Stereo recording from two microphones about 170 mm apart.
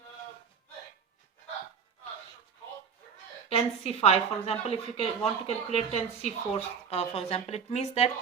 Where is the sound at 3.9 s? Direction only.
35° left (ahead or behind).